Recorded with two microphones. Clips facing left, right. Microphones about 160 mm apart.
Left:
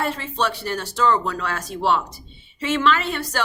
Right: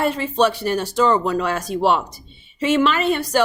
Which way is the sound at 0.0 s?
15° right (ahead or behind).